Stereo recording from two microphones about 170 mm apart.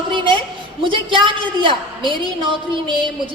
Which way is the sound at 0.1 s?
30° right (ahead or behind).